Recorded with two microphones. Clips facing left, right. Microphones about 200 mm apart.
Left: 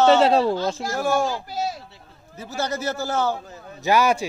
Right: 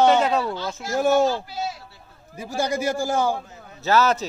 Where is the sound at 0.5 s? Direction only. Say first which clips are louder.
Left 5 dB; 45° left (ahead or behind).